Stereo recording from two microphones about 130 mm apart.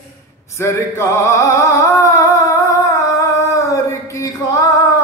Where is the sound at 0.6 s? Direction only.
25° left (ahead or behind).